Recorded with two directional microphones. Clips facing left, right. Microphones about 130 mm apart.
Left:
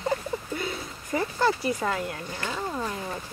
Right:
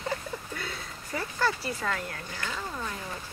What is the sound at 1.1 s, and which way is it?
Speech, 15° left (ahead or behind).